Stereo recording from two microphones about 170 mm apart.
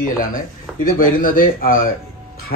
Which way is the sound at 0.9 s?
55° left (ahead or behind).